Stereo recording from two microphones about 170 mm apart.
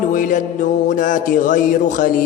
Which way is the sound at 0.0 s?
50° left (ahead or behind).